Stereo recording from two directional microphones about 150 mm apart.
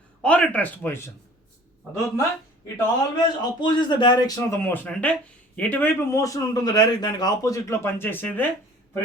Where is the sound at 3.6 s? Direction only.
30° left (ahead or behind); by 8.5 s 10° left (ahead or behind).